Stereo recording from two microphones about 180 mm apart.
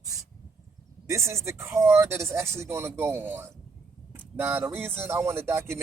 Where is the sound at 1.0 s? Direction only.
15° right (ahead or behind).